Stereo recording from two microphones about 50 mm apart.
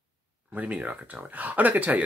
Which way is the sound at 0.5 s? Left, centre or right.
Right.